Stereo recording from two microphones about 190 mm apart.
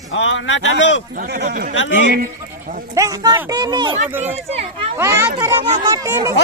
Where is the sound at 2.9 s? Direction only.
20° right (ahead or behind).